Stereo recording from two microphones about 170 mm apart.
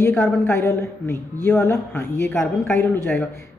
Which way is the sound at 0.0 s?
10° left (ahead or behind).